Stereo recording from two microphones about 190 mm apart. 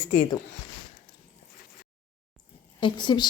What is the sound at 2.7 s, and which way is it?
Speech, 25° left (ahead or behind).